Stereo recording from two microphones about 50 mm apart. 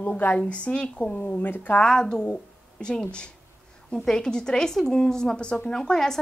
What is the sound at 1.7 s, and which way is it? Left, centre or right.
A woman's voice, centre.